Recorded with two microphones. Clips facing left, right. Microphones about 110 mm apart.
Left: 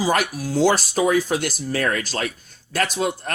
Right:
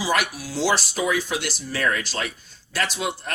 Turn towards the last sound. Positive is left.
turn(degrees=45)  # may be behind; listen again after turning